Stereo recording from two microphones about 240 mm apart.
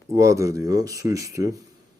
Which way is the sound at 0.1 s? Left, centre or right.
Centre.